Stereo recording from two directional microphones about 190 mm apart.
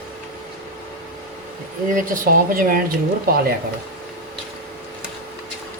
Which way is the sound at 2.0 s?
50° right (ahead or behind).